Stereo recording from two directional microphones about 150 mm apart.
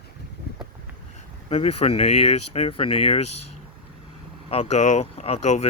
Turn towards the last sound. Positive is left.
turn(degrees=45)  # may be behind; listen again after turning